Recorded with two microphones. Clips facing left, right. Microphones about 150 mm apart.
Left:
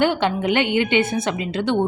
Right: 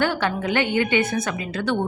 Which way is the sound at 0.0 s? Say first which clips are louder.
Left 4 dB; 20° left (ahead or behind).